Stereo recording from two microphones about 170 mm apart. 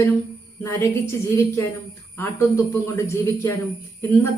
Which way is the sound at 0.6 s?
15° left (ahead or behind).